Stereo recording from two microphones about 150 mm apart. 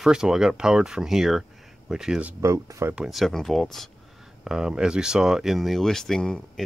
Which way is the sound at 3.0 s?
Centre (ahead or behind).